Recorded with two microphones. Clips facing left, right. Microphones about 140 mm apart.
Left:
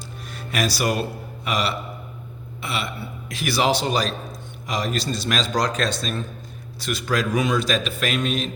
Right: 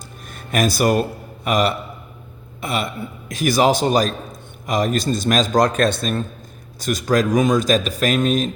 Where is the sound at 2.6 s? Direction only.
45° right (ahead or behind).